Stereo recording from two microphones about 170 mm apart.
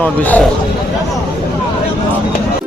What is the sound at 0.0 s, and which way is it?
Speech, 10° left (ahead or behind).